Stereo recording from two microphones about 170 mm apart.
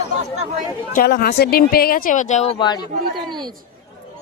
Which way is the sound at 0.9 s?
65° left (ahead or behind).